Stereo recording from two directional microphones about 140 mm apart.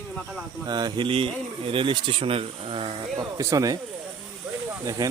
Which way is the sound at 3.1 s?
20° right (ahead or behind).